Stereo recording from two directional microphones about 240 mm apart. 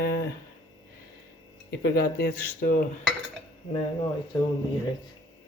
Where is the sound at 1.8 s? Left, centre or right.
Left.